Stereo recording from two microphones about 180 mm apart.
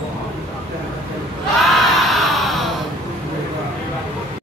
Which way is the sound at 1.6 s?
Centre (ahead or behind).